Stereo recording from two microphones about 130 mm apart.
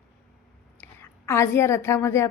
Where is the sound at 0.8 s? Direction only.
20° left (ahead or behind).